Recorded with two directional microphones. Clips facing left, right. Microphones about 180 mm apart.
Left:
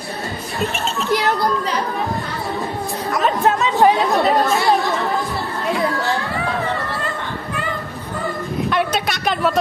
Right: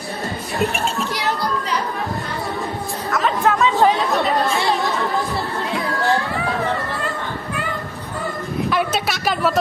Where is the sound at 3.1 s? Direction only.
20° left (ahead or behind).